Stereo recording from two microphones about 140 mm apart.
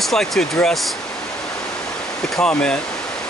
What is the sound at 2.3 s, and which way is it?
Speech, 5° left (ahead or behind).